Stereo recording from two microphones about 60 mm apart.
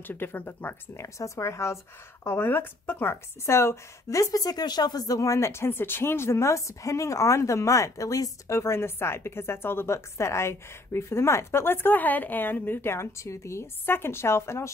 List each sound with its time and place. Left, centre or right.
0.0 s speech: left
0.9 s a woman's voice: left
2.3 s a woman's voice: left
8.5 s a woman's voice: left